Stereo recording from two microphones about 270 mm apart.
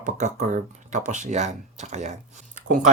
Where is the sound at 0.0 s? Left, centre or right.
Right.